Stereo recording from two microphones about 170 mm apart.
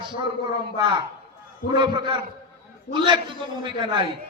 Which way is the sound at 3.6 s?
25° right (ahead or behind).